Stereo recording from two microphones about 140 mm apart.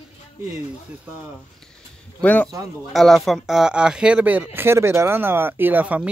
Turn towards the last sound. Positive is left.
turn(degrees=-10)  # may be behind; listen again after turning